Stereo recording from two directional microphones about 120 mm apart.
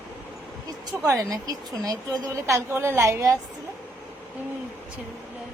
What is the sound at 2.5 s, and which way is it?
Speech, 20° right (ahead or behind).